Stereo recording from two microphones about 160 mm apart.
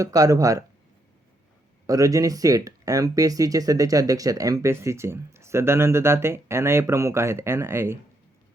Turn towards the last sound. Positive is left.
turn(degrees=-15)  # may be behind; listen again after turning